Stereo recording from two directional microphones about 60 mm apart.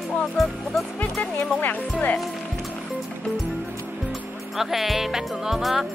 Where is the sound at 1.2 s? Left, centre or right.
Left.